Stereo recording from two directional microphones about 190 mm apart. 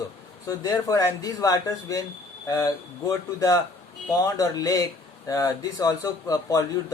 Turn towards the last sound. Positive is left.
turn(degrees=20)  # may be behind; listen again after turning